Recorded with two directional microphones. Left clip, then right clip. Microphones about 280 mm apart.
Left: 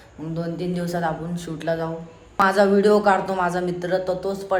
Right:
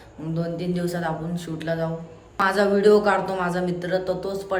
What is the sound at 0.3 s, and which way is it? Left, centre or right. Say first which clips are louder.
A man's voice: even; centre.